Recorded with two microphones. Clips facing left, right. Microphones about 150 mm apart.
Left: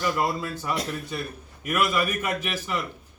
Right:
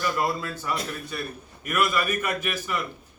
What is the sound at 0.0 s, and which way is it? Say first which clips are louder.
A man's voice: left 1 dB; 20° left (ahead or behind).